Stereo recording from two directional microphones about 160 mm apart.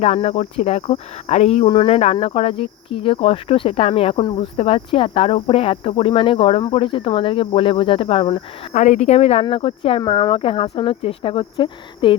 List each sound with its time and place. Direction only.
0.0 s speech: 40° left (ahead or behind)
8.7 s speech: 50° left (ahead or behind); by 12.1 s 30° left (ahead or behind)